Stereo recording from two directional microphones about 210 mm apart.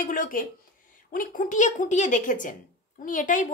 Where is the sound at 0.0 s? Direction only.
40° left (ahead or behind).